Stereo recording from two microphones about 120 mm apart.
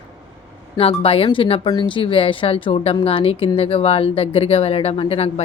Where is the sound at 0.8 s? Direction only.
50° left (ahead or behind).